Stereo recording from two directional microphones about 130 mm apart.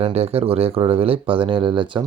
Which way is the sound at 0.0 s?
50° right (ahead or behind).